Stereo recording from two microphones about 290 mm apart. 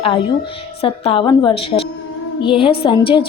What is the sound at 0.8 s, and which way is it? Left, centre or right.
A woman's voice, centre.